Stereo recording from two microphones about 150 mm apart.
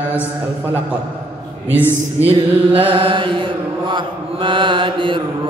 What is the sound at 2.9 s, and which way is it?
Mantra, 35° right (ahead or behind).